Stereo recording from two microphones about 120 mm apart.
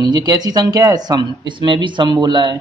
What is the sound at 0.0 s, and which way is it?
A man's voice, 35° right (ahead or behind).